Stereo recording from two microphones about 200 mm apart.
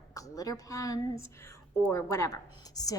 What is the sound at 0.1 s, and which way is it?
Speech, 15° left (ahead or behind).